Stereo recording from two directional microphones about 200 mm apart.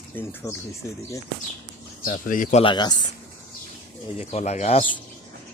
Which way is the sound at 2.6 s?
20° left (ahead or behind).